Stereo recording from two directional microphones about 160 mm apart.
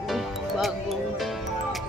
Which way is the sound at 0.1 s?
Centre (ahead or behind).